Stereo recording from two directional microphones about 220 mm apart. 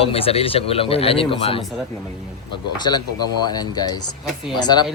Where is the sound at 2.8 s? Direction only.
20° left (ahead or behind).